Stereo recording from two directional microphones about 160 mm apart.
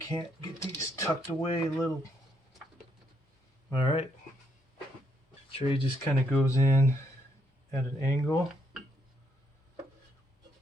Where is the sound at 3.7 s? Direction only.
30° left (ahead or behind).